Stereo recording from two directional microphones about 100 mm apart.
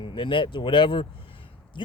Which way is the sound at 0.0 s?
55° left (ahead or behind).